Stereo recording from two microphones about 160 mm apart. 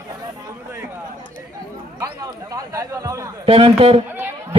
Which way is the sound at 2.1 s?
20° right (ahead or behind).